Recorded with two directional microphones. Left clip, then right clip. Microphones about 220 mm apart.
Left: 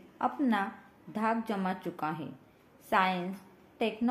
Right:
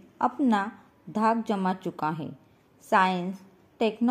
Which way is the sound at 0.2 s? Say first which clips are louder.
Right 5 dB; 30° right (ahead or behind).